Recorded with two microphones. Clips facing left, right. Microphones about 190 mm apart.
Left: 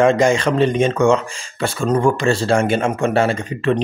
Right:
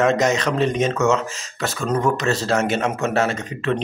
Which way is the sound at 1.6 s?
30° left (ahead or behind).